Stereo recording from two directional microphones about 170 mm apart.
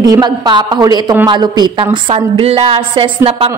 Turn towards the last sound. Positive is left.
turn(degrees=-30)  # may be behind; listen again after turning